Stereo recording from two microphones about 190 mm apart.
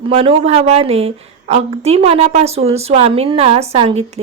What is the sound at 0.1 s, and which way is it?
A woman's voice, 30° right (ahead or behind).